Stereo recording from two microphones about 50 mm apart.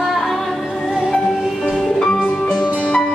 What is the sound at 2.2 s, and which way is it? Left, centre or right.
Music, left.